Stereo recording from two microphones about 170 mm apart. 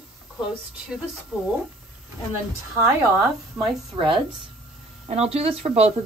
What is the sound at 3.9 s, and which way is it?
A woman's voice, 30° right (ahead or behind).